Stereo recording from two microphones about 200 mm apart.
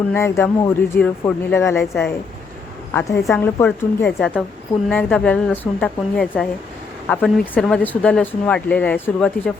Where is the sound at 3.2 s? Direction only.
5° left (ahead or behind).